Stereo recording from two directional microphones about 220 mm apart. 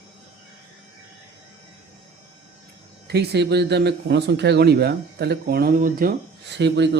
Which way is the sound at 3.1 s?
50° right (ahead or behind).